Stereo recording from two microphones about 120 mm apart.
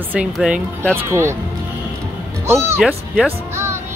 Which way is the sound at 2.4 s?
20° right (ahead or behind).